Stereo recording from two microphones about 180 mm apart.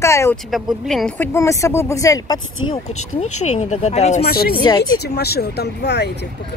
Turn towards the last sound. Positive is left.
turn(degrees=70)  # may be behind; listen again after turning